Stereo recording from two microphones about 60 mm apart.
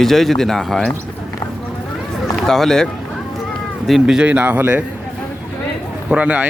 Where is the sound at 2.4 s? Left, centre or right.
Centre.